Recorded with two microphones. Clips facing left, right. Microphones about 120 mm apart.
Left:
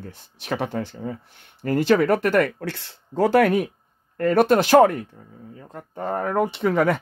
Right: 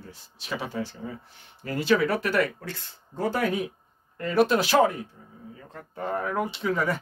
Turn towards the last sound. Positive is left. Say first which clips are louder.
# left 6 dB
turn(degrees=65)  # may be behind; listen again after turning